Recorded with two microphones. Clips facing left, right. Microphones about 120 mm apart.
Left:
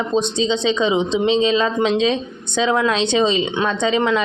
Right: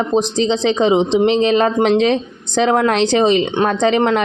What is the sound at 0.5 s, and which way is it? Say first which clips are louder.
Speech: right 4 dB; 35° right (ahead or behind).